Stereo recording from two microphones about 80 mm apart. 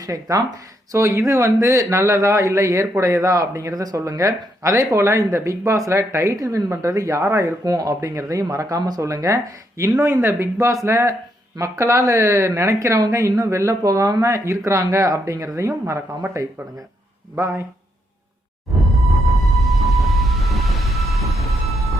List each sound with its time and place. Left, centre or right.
0.0 s speech: right
7.6 s speech: right
17.3 s speech: right
19.1 s music: centre